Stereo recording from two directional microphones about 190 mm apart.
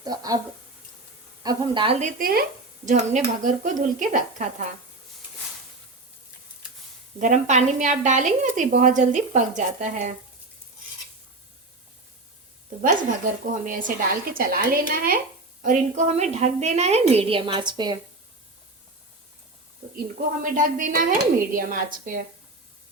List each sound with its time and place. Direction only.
0.0 s speech: 20° right (ahead or behind)
1.5 s speech: 25° right (ahead or behind)
2.0 s a woman's voice: 45° right (ahead or behind)
7.2 s a woman's voice: 40° right (ahead or behind)
12.8 s a woman's voice: 45° right (ahead or behind); by 17.9 s 20° right (ahead or behind)
20.0 s a woman's voice: 45° right (ahead or behind)